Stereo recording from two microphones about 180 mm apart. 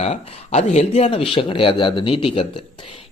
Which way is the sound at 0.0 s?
35° left (ahead or behind).